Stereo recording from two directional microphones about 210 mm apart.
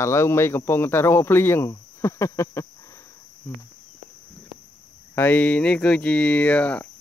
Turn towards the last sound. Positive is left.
turn(degrees=5)  # may be behind; listen again after turning